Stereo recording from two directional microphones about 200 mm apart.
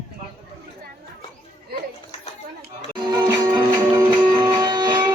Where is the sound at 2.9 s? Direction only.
20° right (ahead or behind).